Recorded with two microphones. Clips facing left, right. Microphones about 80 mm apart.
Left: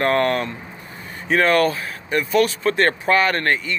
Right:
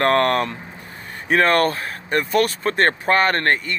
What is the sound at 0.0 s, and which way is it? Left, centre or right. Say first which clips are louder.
Speech: right 1 dB; right.